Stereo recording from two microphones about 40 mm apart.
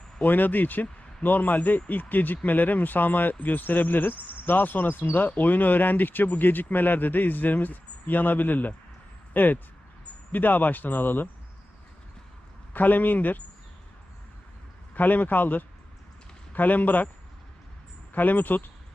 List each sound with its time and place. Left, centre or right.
0.3 s speech: left
12.7 s speech: left
14.9 s a man's voice: left
18.1 s speech: left